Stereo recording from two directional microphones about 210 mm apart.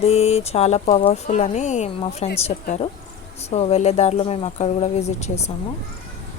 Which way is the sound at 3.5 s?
30° left (ahead or behind).